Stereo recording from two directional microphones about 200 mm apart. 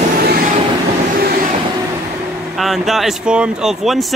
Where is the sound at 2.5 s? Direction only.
Centre (ahead or behind).